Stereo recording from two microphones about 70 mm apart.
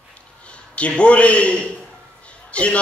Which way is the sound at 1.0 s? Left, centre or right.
Centre.